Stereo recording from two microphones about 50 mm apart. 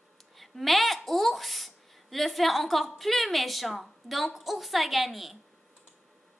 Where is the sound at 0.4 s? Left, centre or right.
Centre.